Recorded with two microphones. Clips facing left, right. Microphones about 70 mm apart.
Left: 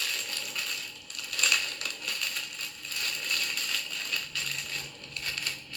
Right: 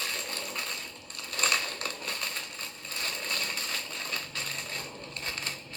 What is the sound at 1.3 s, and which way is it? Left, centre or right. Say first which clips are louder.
Crushing: right 1 dB; right.